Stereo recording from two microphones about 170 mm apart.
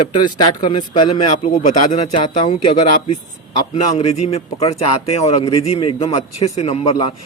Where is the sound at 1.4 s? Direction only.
50° left (ahead or behind).